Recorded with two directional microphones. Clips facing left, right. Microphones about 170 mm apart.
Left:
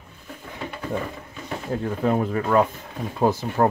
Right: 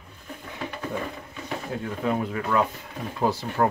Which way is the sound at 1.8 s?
40° left (ahead or behind).